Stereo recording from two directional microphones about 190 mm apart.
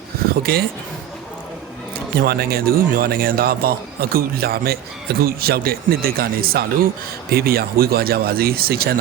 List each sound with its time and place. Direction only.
0.5 s a man's voice: 55° right (ahead or behind)
2.2 s a man's voice: 55° right (ahead or behind)